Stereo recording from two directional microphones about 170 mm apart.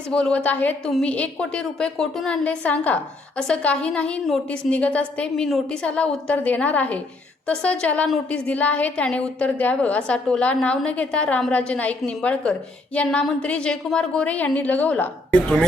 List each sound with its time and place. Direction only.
0.1 s a woman's voice: 5° left (ahead or behind)